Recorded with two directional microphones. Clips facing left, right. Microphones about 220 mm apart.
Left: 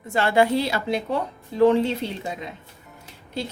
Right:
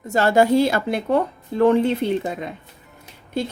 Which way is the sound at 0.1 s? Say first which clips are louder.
Right 4 dB; 40° right (ahead or behind).